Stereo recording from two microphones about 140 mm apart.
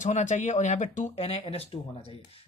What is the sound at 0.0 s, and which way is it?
Speech, 55° left (ahead or behind).